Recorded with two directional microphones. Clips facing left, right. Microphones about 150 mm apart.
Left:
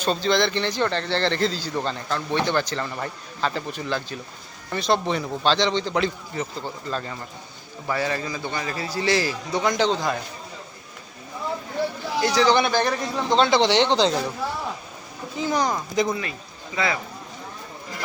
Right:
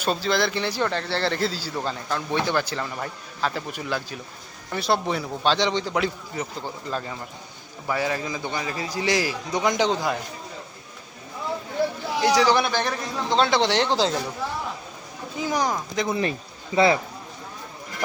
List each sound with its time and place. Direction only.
0.0 s speech: 5° right (ahead or behind)
12.2 s speech: 10° right (ahead or behind)
15.4 s speech: 10° right (ahead or behind)
16.7 s speech: 30° right (ahead or behind)